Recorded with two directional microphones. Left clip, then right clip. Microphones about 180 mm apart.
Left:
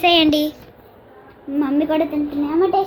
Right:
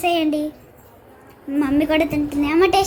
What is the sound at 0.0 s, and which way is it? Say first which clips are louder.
Speech: left 5 dB; centre (ahead or behind).